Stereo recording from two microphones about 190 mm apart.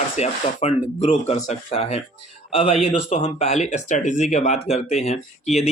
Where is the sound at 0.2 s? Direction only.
35° left (ahead or behind).